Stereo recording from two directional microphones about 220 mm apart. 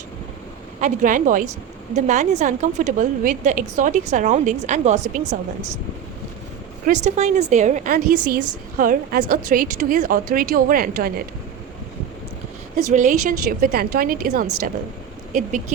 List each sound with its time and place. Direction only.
0.8 s a woman's voice: 35° right (ahead or behind)
6.8 s a woman's voice: 30° right (ahead or behind)
12.9 s a woman's voice: 35° right (ahead or behind)
14.4 s a woman's voice: 85° right
15.3 s a woman's voice: 35° right (ahead or behind)